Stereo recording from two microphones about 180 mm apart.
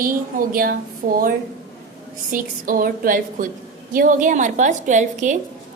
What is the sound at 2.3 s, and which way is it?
A woman's voice, 50° right (ahead or behind).